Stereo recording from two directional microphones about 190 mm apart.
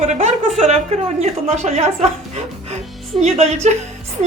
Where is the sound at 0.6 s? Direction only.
35° right (ahead or behind).